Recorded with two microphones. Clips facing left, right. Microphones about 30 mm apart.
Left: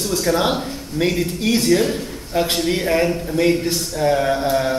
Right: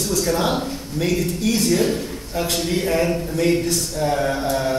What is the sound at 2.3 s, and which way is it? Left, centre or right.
Speech, left.